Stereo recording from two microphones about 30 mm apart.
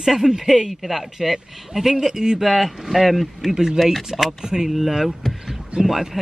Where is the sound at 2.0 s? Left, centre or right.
Centre.